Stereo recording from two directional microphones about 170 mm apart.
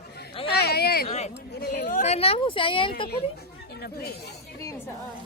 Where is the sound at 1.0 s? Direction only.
40° left (ahead or behind).